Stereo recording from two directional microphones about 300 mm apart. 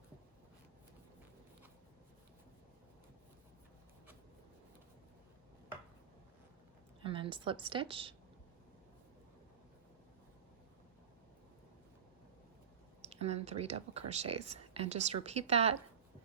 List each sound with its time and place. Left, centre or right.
7.0 s a woman's voice: centre
13.0 s speech: right